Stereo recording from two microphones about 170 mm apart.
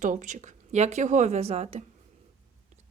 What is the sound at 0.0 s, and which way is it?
Speech, 45° right (ahead or behind).